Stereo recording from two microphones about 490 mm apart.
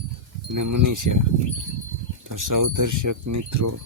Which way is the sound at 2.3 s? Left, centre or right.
Right.